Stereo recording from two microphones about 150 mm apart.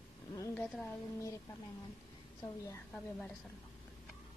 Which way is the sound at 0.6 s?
Centre (ahead or behind).